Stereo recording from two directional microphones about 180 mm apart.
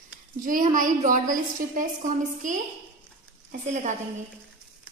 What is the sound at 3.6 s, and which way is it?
Speech, 40° right (ahead or behind).